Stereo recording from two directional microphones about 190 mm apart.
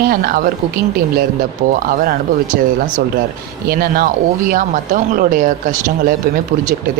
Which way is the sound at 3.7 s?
50° right (ahead or behind).